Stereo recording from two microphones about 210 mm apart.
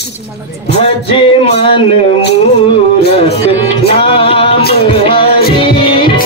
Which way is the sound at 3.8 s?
25° left (ahead or behind).